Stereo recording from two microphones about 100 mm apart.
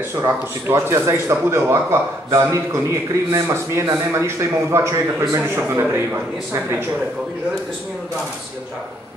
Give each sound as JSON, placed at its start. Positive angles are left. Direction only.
{"t": 0.7, "sound": "a man's voice", "side_deg": -25}